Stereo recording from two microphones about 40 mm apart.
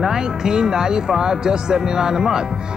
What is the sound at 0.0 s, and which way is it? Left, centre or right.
Speech, centre.